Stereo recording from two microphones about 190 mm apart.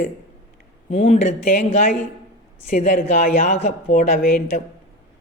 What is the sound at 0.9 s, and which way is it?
A woman's voice, 35° left (ahead or behind).